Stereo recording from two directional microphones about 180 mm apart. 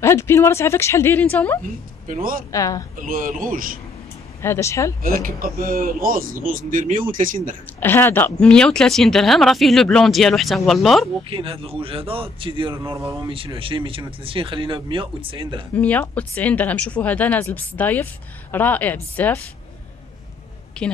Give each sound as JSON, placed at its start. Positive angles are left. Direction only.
{"t": 0.0, "sound": "speech", "side_deg": 15}
{"t": 2.0, "sound": "a man's voice", "side_deg": -50}
{"t": 2.5, "sound": "speech", "side_deg": 15}
{"t": 3.0, "sound": "a man's voice", "side_deg": -50}
{"t": 4.4, "sound": "speech", "side_deg": 15}
{"t": 5.2, "sound": "a man's voice", "side_deg": -55}
{"t": 7.8, "sound": "speech", "side_deg": 10}
{"t": 11.2, "sound": "speech", "side_deg": -30}
{"t": 12.9, "sound": "speech", "side_deg": -15}
{"t": 13.3, "sound": "speech", "side_deg": -30}
{"t": 15.7, "sound": "speech", "side_deg": 10}
{"t": 20.8, "sound": "a woman's voice", "side_deg": 5}